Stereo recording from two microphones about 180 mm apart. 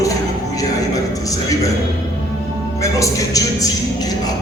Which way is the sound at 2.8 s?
20° left (ahead or behind).